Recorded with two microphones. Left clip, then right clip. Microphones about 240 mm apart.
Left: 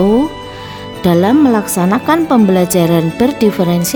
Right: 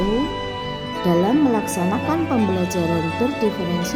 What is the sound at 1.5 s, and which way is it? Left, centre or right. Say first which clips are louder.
Speech: left 7 dB; left.